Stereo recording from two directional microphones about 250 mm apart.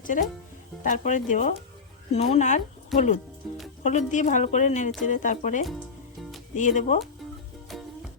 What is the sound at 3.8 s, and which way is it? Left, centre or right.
A woman's voice, left.